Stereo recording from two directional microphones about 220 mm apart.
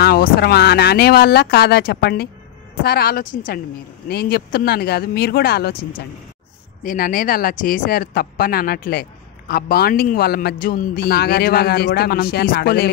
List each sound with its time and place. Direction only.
0.0 s a man's voice: 45° left (ahead or behind)